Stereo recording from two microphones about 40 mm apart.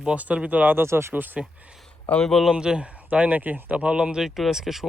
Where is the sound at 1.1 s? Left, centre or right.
Right.